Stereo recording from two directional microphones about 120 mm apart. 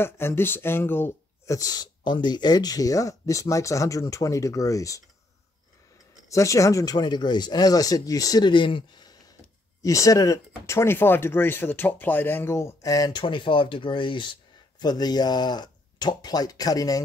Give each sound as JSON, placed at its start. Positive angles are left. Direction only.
{"t": 0.0, "sound": "speech", "side_deg": 20}
{"t": 6.2, "sound": "speech", "side_deg": 25}
{"t": 9.8, "sound": "speech", "side_deg": 25}
{"t": 13.2, "sound": "speech", "side_deg": 45}